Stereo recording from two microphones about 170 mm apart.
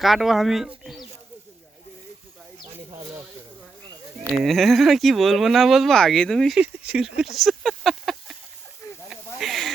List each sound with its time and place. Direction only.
0.0 s speech: centre (ahead or behind)
3.0 s snake: 20° right (ahead or behind)
4.4 s speech: centre (ahead or behind)
7.2 s a sound: centre (ahead or behind)
9.4 s snake: centre (ahead or behind)